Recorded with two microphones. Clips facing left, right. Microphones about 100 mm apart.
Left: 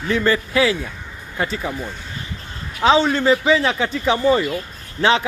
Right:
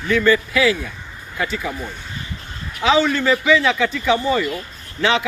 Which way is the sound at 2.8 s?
30° left (ahead or behind).